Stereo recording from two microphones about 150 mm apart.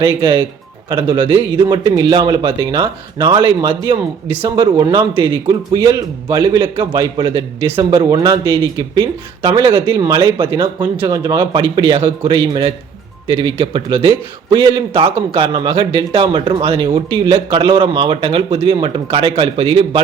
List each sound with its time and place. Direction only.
0.0 s a man's voice: 35° right (ahead or behind)
11.3 s a man's voice: 35° right (ahead or behind)